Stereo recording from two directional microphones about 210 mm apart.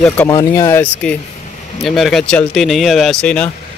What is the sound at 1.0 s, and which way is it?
Speech, 5° left (ahead or behind).